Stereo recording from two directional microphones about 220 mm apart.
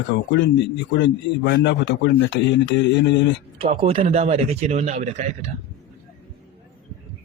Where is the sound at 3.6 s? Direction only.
25° right (ahead or behind).